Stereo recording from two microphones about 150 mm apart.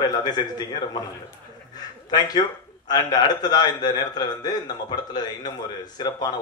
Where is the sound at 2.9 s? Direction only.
25° left (ahead or behind).